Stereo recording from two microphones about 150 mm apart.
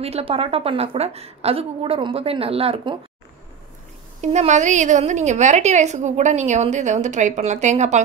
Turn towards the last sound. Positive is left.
turn(degrees=-50)  # may be behind; listen again after turning